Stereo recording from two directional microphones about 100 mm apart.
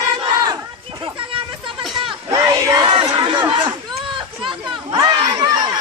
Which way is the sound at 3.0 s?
55° right (ahead or behind).